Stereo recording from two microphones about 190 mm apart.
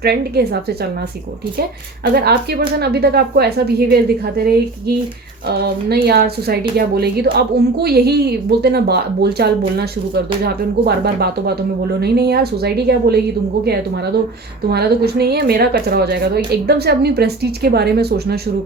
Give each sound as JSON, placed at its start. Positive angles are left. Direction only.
{"t": 0.0, "sound": "a woman's voice", "side_deg": -55}
{"t": 2.1, "sound": "a woman's voice", "side_deg": -55}
{"t": 5.6, "sound": "a woman's voice", "side_deg": -55}